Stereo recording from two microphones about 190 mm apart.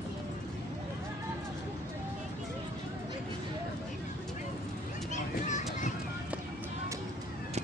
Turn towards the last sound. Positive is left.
turn(degrees=40)  # may be behind; listen again after turning